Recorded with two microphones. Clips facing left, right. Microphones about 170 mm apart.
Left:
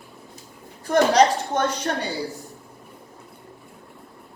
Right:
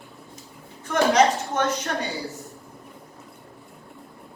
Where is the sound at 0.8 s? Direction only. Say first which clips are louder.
Left 2 dB; 35° left (ahead or behind).